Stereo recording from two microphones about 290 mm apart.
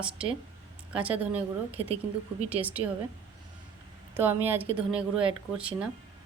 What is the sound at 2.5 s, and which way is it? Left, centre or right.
Speech, centre.